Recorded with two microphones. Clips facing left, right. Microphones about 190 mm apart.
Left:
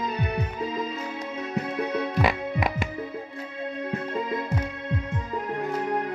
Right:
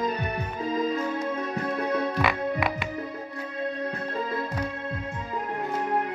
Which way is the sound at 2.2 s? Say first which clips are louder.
Even; 40° left (ahead or behind).